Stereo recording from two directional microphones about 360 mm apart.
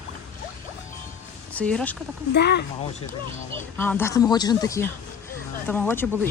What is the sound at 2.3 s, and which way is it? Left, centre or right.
Speech, left.